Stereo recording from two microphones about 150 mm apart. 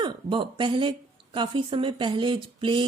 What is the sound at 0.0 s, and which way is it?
A woman's voice, 30° right (ahead or behind).